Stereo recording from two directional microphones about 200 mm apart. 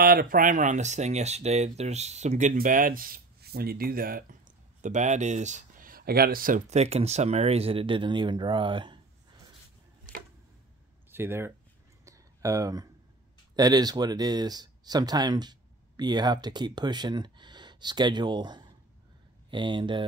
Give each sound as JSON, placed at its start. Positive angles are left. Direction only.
{"t": 0.0, "sound": "speech", "side_deg": -45}
{"t": 11.1, "sound": "speech", "side_deg": -10}
{"t": 12.0, "sound": "a sound", "side_deg": -15}
{"t": 13.6, "sound": "speech", "side_deg": -20}